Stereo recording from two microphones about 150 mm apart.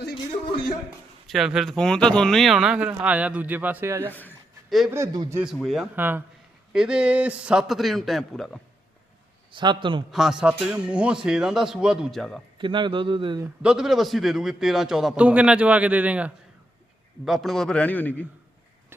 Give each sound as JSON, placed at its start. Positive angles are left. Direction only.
{"t": 1.3, "sound": "a man's voice", "side_deg": -5}
{"t": 5.4, "sound": "speech", "side_deg": 0}
{"t": 6.0, "sound": "a man's voice", "side_deg": -15}
{"t": 9.5, "sound": "a man's voice", "side_deg": -30}
{"t": 10.1, "sound": "speech", "side_deg": 0}
{"t": 12.5, "sound": "a man's voice", "side_deg": -30}
{"t": 13.6, "sound": "a man's voice", "side_deg": -5}